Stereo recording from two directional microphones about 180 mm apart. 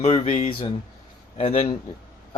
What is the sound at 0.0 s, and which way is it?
Speech, 40° left (ahead or behind).